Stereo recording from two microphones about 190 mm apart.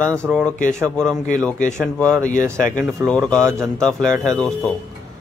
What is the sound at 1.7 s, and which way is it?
Speech, 5° left (ahead or behind).